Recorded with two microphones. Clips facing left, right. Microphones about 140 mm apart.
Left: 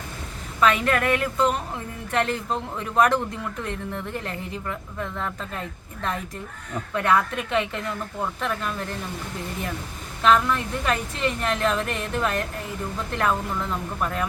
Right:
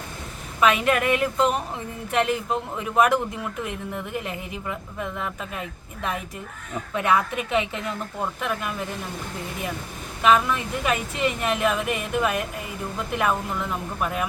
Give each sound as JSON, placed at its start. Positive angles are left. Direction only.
{"t": 0.6, "sound": "speech", "side_deg": -15}
{"t": 10.2, "sound": "speech", "side_deg": -10}